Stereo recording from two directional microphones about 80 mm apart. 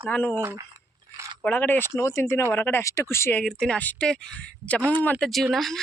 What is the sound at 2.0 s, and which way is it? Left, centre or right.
Speech, left.